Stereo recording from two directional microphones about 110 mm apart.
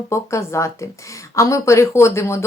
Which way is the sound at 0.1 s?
25° left (ahead or behind).